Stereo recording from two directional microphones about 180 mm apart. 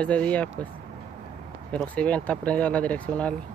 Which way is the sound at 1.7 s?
5° left (ahead or behind).